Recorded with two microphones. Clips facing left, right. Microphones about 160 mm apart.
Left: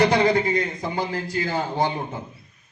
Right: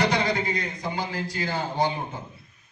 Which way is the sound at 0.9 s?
45° left (ahead or behind).